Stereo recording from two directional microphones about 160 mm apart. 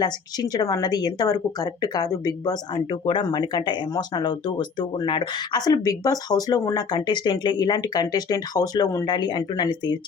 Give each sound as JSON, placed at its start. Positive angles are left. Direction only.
{"t": 0.0, "sound": "a woman's voice", "side_deg": 25}